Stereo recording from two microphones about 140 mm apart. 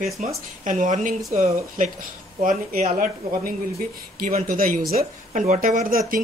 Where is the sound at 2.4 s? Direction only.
85° right.